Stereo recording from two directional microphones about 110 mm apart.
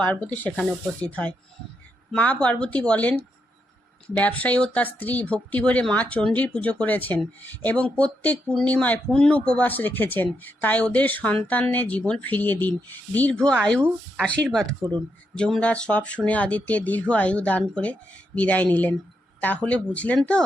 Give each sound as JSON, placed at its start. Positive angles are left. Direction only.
{"t": 0.0, "sound": "speech", "side_deg": 15}
{"t": 14.8, "sound": "speech", "side_deg": -40}
{"t": 15.4, "sound": "speech", "side_deg": 5}